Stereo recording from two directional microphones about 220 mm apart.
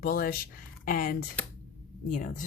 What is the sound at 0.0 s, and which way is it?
Speech, 40° left (ahead or behind).